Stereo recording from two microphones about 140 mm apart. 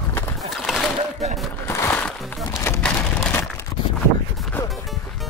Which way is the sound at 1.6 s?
20° left (ahead or behind).